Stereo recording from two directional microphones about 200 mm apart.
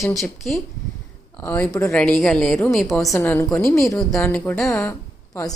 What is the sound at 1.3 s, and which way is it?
Music, 10° left (ahead or behind).